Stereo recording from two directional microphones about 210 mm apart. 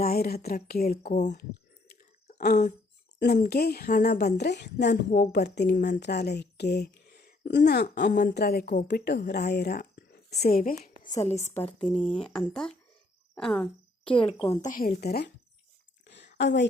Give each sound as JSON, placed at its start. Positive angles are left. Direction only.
{"t": 0.0, "sound": "a woman's voice", "side_deg": 45}
{"t": 2.4, "sound": "a woman's voice", "side_deg": 40}
{"t": 8.1, "sound": "a woman's voice", "side_deg": 45}
{"t": 8.9, "sound": "speech", "side_deg": 50}
{"t": 11.8, "sound": "speech", "side_deg": 5}
{"t": 14.0, "sound": "speech", "side_deg": 25}
{"t": 14.6, "sound": "a woman's voice", "side_deg": 40}
{"t": 16.0, "sound": "a sound", "side_deg": 55}